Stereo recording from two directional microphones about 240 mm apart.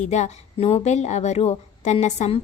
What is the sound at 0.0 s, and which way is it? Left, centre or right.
A woman's voice, left.